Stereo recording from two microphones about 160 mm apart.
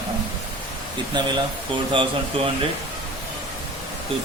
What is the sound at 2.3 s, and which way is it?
Speech, 35° right (ahead or behind).